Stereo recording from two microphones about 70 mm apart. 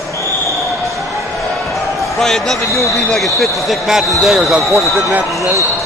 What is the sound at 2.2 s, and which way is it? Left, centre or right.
A man's voice, centre.